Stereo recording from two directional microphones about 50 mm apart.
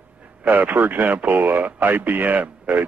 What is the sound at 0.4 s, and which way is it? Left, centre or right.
A man's voice, right.